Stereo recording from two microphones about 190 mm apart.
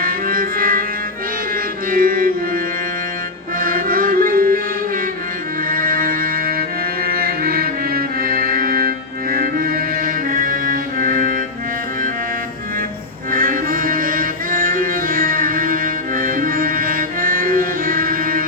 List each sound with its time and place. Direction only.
0.0 s music: 50° right (ahead or behind)
1.9 s music: 50° right (ahead or behind)
3.6 s music: 50° right (ahead or behind)
5.6 s music: 50° right (ahead or behind)
13.3 s music: 45° right (ahead or behind)